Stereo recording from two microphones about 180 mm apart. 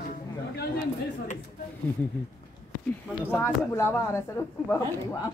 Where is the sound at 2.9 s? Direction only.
10° left (ahead or behind).